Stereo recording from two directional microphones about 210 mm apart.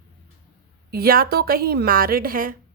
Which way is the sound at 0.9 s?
45° right (ahead or behind).